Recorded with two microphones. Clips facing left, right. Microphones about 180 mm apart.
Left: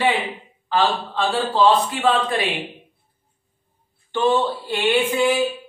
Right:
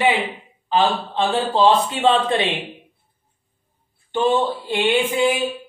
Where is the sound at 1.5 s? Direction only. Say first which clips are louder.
Even; 25° right (ahead or behind).